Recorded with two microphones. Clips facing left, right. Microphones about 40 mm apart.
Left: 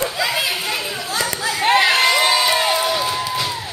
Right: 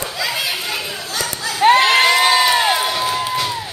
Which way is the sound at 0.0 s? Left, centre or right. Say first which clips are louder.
Left 2 dB; centre.